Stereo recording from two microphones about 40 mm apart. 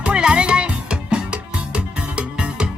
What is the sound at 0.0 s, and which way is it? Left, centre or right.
Music, right.